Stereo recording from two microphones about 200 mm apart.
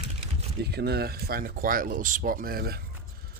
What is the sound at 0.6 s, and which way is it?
Speech, 55° right (ahead or behind).